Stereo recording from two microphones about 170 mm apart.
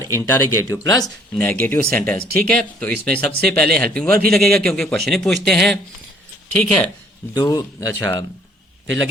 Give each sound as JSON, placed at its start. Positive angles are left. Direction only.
{"t": 0.1, "sound": "a man's voice", "side_deg": 15}
{"t": 7.3, "sound": "speech", "side_deg": 20}